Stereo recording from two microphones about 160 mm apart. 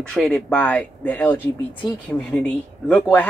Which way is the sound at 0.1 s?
5° left (ahead or behind).